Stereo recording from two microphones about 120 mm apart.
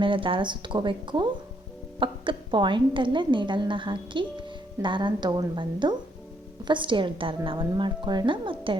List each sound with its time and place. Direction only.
0.0 s a woman's voice: 45° right (ahead or behind)